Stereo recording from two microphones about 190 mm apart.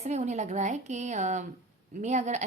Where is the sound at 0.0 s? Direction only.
35° right (ahead or behind).